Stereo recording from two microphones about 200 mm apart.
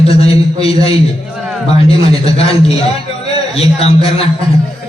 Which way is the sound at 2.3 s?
30° left (ahead or behind).